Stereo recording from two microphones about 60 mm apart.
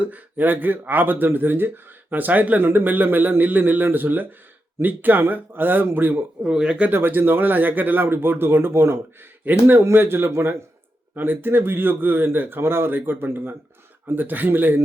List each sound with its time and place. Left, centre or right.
0.0 s speech: right
6.4 s speech: centre; by 9.0 s right
9.4 s speech: right